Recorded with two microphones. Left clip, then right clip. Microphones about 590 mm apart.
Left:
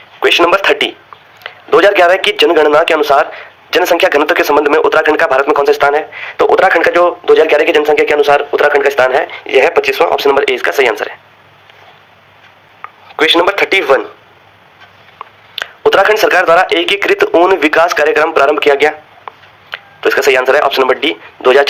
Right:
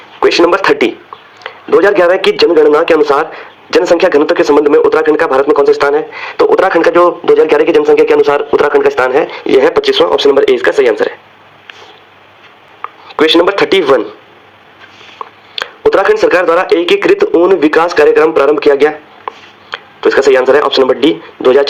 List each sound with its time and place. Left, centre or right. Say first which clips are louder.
0.2 s a man's voice: right 1 dB; centre
12.8 s speech: right 2 dB; centre
15.2 s a sound: right 5 dB; centre
15.9 s a man's voice: even; centre